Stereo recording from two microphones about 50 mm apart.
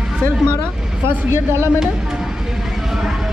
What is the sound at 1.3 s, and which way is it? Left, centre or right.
Speech, right.